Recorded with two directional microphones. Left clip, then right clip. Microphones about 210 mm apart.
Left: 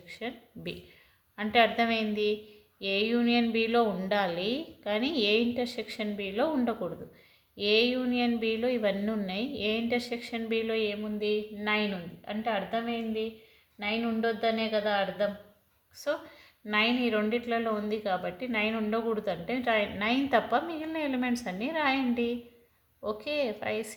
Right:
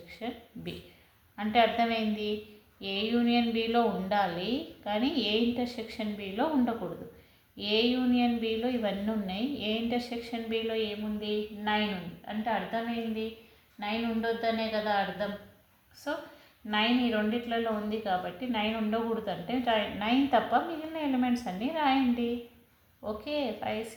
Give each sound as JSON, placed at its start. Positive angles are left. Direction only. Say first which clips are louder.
{"t": 0.1, "sound": "a woman's voice", "louder": "left 1 dB", "side_deg": 45}
{"t": 16.6, "sound": "a woman's voice", "louder": "left 1 dB", "side_deg": 45}
{"t": 23.0, "sound": "a woman's voice", "louder": "left 2 dB", "side_deg": 40}